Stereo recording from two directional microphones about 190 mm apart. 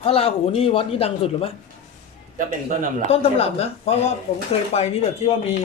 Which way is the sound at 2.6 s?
45° right (ahead or behind).